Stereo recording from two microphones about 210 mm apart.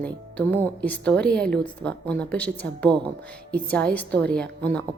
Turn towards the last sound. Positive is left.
turn(degrees=5)  # may be behind; listen again after turning